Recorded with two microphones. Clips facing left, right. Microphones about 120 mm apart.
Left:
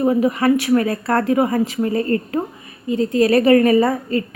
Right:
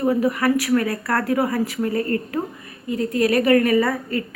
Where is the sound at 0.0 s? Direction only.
20° left (ahead or behind).